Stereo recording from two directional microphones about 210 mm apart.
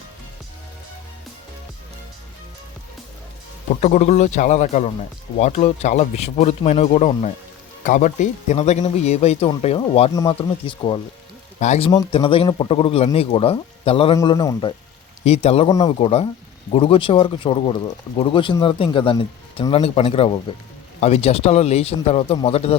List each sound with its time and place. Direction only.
3.8 s speech: 35° left (ahead or behind)
11.9 s speech: 20° left (ahead or behind)
14.2 s a man's voice: 15° left (ahead or behind)
15.2 s speech: 30° left (ahead or behind)